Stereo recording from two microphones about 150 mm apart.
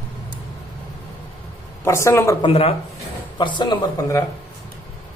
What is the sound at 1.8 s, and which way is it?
Speech, 20° left (ahead or behind).